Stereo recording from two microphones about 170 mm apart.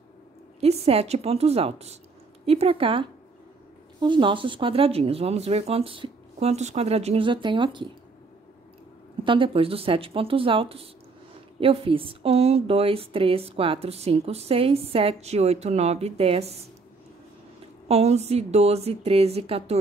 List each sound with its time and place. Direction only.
0.6 s a woman's voice: 35° right (ahead or behind)
9.2 s a woman's voice: 30° right (ahead or behind)
17.8 s a woman's voice: 40° right (ahead or behind)